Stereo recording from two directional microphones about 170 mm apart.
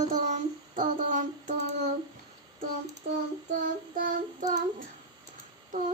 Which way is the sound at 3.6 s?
55° right (ahead or behind).